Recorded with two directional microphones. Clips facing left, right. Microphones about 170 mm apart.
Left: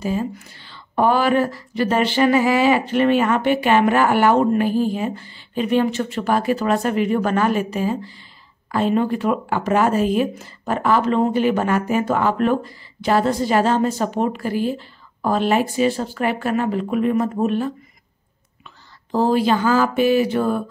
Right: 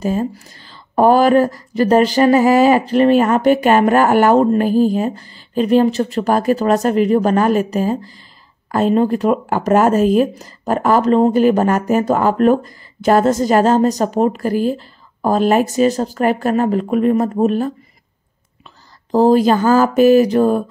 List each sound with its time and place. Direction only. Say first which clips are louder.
0.0 s speech: right 4 dB; 45° right (ahead or behind)
19.1 s speech: right 6 dB; 40° right (ahead or behind)